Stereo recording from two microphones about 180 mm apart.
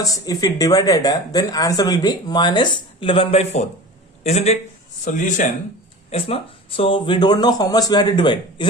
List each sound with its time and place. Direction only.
0.0 s a woman's voice: 20° left (ahead or behind); by 5.5 s 45° left (ahead or behind)
6.1 s a woman's voice: 30° left (ahead or behind)